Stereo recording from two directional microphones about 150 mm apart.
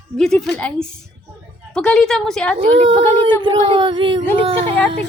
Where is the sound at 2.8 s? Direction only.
30° right (ahead or behind).